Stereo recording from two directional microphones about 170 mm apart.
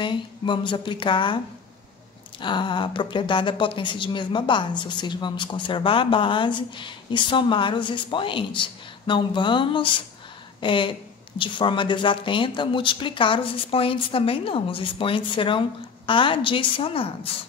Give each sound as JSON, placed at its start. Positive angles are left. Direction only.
{"t": 0.0, "sound": "a woman's voice", "side_deg": 30}
{"t": 2.4, "sound": "a woman's voice", "side_deg": 30}